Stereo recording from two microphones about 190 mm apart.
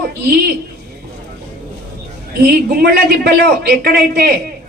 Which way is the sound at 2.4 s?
55° right (ahead or behind).